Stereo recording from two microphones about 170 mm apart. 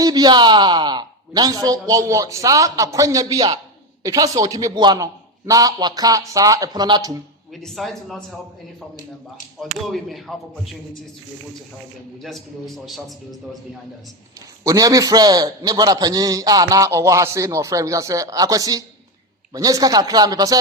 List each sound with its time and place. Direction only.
0.0 s a man's voice: 25° right (ahead or behind)
7.5 s speech: centre (ahead or behind)
9.6 s speech: centre (ahead or behind)
12.2 s speech: centre (ahead or behind)
14.6 s a man's voice: 20° right (ahead or behind)